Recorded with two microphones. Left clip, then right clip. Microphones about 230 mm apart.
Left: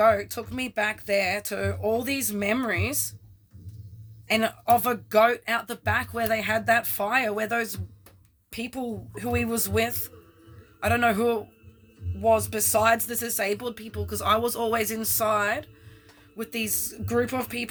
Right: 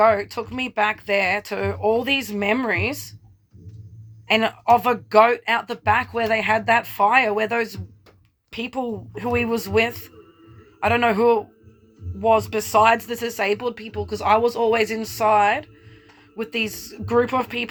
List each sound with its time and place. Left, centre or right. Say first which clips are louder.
0.0 s speech: right 4 dB; centre
4.3 s speech: right 5 dB; centre
8.5 s speech: right 6 dB; centre